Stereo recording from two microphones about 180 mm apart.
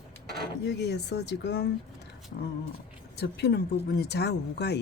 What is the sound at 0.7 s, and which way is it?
Speech, 70° left (ahead or behind).